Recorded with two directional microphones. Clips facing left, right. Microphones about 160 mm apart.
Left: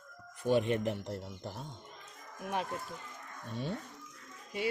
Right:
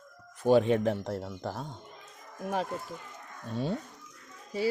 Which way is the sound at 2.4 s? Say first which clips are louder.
Right 4 dB; 35° right (ahead or behind).